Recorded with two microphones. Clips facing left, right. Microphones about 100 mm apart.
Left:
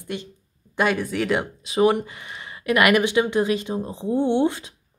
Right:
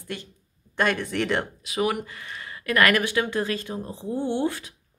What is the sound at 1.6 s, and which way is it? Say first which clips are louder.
Speech: left 7 dB; 25° left (ahead or behind).